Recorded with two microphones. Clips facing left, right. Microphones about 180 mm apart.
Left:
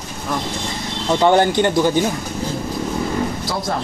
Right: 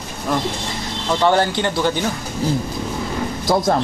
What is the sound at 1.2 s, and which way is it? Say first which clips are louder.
Speech: left 3 dB; 20° left (ahead or behind).